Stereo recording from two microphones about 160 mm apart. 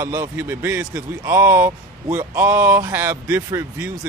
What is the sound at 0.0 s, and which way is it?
A man's voice, 15° right (ahead or behind).